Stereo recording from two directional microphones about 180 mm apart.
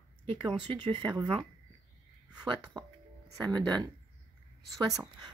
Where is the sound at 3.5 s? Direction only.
25° right (ahead or behind).